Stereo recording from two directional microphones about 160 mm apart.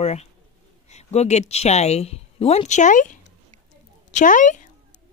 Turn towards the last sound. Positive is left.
turn(degrees=50)  # may be behind; listen again after turning